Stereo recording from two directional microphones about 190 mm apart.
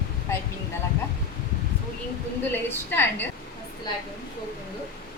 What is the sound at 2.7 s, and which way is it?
Speech, 10° left (ahead or behind).